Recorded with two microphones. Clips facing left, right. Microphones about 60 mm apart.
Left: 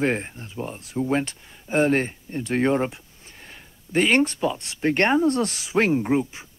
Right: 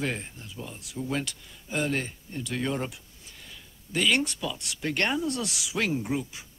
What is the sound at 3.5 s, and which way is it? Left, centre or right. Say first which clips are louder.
Speech: left 8 dB; left.